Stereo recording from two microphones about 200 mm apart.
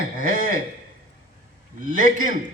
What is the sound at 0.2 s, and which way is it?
Speech, 45° right (ahead or behind).